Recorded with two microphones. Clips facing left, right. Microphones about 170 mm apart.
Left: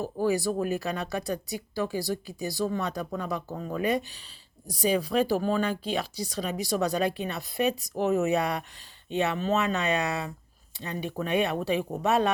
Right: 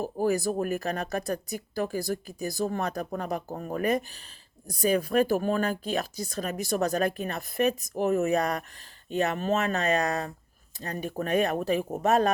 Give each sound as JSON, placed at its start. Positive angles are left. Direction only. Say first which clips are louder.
{"t": 0.0, "sound": "speech", "louder": "even", "side_deg": -45}